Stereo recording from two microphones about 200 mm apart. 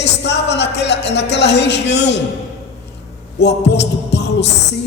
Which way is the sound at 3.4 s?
60° left (ahead or behind).